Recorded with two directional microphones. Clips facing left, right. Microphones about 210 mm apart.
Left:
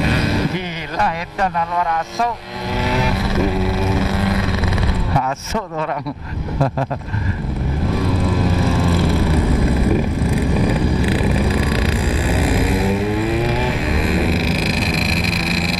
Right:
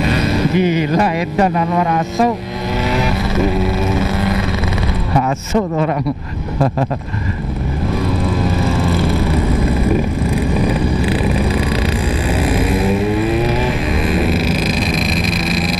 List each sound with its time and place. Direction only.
0.0 s speech: 10° right (ahead or behind)
2.8 s vehicle: 10° right (ahead or behind)
5.5 s speech: 20° right (ahead or behind)
15.0 s a sound: 10° right (ahead or behind)